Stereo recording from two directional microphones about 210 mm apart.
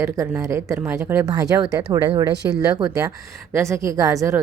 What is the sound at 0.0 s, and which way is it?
Speech, 15° right (ahead or behind).